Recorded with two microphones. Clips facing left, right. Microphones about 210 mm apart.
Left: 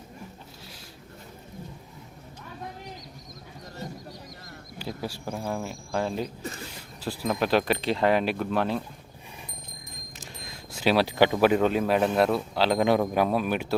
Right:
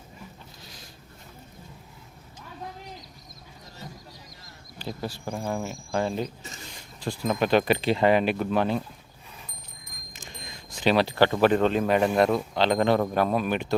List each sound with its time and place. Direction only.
4.8 s speech: 5° left (ahead or behind)
10.1 s speech: 5° left (ahead or behind)